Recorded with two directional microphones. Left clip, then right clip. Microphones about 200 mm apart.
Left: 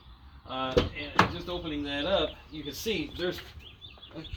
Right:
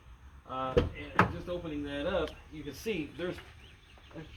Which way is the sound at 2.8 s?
10° left (ahead or behind).